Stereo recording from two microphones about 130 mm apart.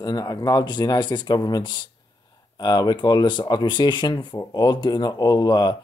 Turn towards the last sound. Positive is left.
turn(degrees=30)  # may be behind; listen again after turning